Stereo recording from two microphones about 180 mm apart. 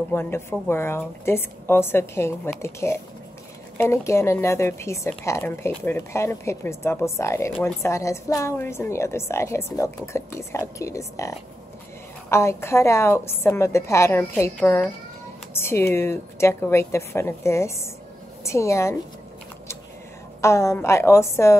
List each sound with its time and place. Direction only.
0.1 s a woman's voice: 15° left (ahead or behind)
20.4 s speech: 15° left (ahead or behind)